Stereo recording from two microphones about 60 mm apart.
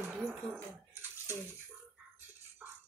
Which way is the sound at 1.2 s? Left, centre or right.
Right.